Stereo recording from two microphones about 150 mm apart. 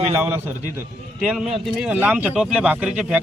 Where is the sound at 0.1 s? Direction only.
15° right (ahead or behind).